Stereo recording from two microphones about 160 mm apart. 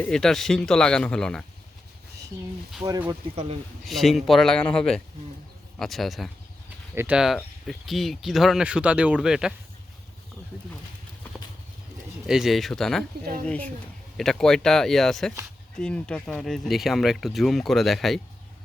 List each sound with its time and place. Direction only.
0.0 s speech: 5° left (ahead or behind)
2.8 s speech: 25° right (ahead or behind)
3.8 s speech: centre (ahead or behind)
6.9 s speech: 15° right (ahead or behind)
7.2 s speech: centre (ahead or behind)
12.2 s speech: centre (ahead or behind)